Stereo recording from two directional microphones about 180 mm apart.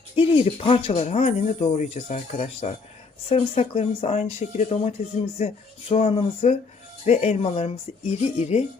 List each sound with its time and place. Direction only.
0.2 s speech: 30° left (ahead or behind)